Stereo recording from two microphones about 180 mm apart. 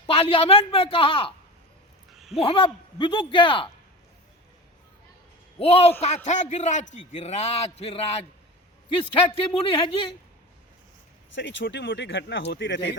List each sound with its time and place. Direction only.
0.1 s a man's voice: 30° left (ahead or behind)
2.3 s speech: 30° left (ahead or behind)
5.5 s a man's voice: 35° left (ahead or behind)
11.3 s speech: 80° left